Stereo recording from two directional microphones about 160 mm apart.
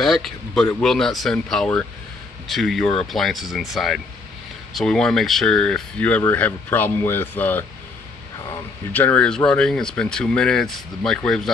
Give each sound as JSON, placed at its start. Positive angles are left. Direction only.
{"t": 0.0, "sound": "speech", "side_deg": 0}
{"t": 8.9, "sound": "speech", "side_deg": 10}